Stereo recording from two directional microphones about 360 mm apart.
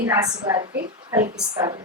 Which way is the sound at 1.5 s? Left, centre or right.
Centre.